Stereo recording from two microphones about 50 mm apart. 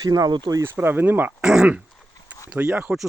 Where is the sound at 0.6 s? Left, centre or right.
Right.